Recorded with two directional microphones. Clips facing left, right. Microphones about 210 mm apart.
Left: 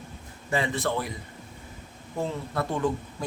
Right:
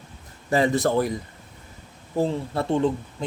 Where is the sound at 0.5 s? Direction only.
40° right (ahead or behind).